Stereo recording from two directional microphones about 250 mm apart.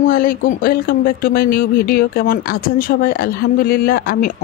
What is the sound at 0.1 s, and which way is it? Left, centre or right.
Speech, left.